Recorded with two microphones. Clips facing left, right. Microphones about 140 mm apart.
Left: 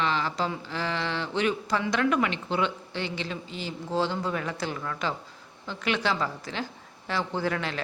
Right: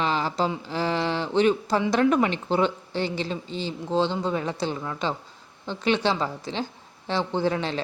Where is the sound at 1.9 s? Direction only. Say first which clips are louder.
Right 4 dB; 35° right (ahead or behind).